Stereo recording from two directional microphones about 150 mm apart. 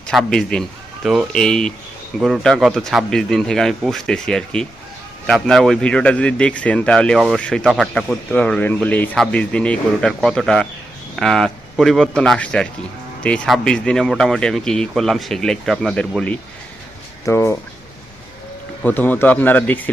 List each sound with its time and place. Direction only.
0.1 s speech: centre (ahead or behind)
17.2 s speech: 15° left (ahead or behind)
18.8 s speech: 10° left (ahead or behind)